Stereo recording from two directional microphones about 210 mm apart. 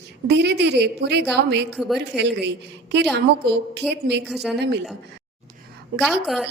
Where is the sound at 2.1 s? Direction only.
5° right (ahead or behind).